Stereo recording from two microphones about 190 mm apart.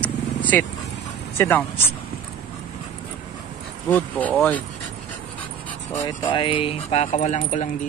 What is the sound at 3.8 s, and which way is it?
Speech, 10° left (ahead or behind).